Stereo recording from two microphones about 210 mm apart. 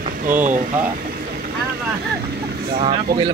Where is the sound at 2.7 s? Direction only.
25° right (ahead or behind).